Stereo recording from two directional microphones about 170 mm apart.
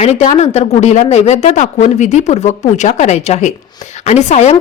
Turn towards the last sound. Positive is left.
turn(degrees=40)  # may be behind; listen again after turning